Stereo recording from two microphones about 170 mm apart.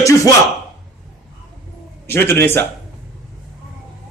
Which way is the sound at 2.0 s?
15° left (ahead or behind).